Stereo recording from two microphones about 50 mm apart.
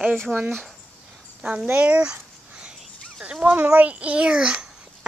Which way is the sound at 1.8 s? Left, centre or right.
Right.